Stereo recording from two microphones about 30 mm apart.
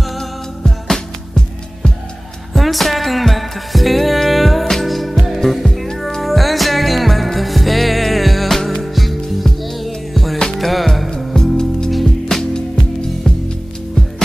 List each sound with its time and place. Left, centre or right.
0.7 s music: centre
2.5 s music: centre